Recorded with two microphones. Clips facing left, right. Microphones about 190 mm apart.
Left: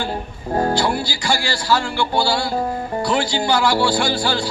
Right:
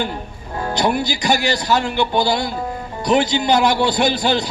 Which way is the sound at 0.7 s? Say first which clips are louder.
Right 1 dB; 20° right (ahead or behind).